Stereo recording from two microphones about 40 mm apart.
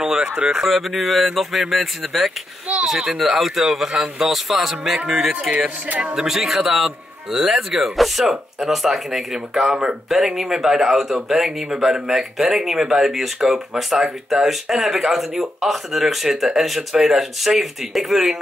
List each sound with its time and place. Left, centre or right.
0.0 s a sound: centre
0.7 s speech: centre
6.1 s speech: centre